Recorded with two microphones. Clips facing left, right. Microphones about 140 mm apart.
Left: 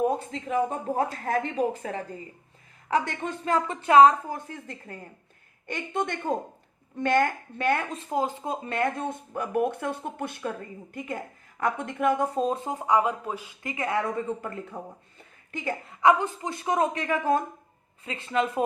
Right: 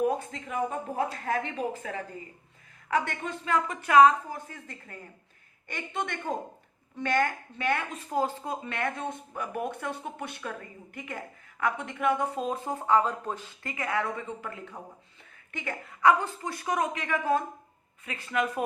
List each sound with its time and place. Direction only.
0.0 s speech: 30° left (ahead or behind)
5.6 s speech: 50° left (ahead or behind)
7.9 s speech: 20° left (ahead or behind)
8.6 s speech: 35° left (ahead or behind)
9.3 s speech: 50° left (ahead or behind)
10.9 s speech: 30° left (ahead or behind)
11.6 s speech: 45° left (ahead or behind)
12.5 s speech: 20° left (ahead or behind)
14.2 s speech: 40° left (ahead or behind)
16.0 s speech: 20° left (ahead or behind); by 17.4 s 40° left (ahead or behind)
18.0 s speech: 25° left (ahead or behind)